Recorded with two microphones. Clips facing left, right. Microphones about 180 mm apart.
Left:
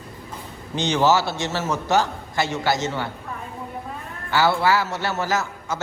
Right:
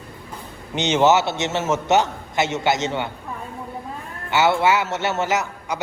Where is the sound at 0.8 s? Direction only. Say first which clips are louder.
Right 2 dB; 20° right (ahead or behind).